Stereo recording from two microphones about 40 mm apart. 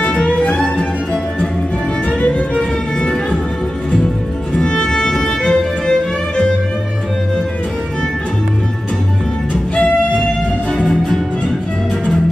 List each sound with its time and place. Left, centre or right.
0.0 s music: left
2.5 s music: left
4.6 s music: centre